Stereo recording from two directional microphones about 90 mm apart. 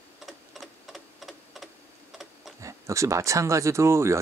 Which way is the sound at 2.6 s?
35° right (ahead or behind).